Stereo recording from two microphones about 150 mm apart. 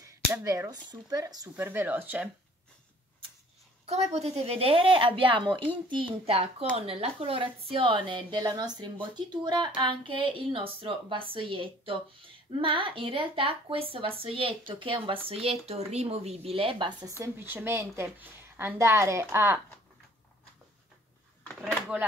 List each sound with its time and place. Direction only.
0.0 s speech: 20° right (ahead or behind)
1.6 s a woman's voice: 15° right (ahead or behind)
3.8 s a woman's voice: 45° right (ahead or behind)
17.2 s a woman's voice: 15° right (ahead or behind)
21.9 s a woman's voice: 10° right (ahead or behind)